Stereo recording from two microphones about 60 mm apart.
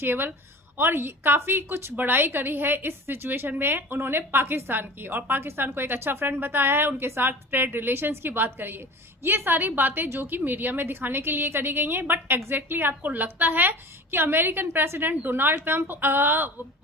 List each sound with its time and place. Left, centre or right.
0.0 s a woman's voice: right